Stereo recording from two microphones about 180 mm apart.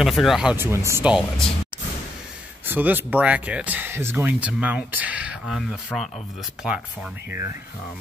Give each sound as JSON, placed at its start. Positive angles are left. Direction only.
{"t": 0.0, "sound": "speech", "side_deg": 0}
{"t": 2.6, "sound": "speech", "side_deg": -10}